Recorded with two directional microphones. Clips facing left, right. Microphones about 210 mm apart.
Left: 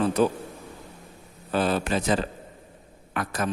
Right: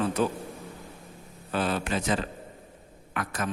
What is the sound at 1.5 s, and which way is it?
A man's voice, 35° left (ahead or behind).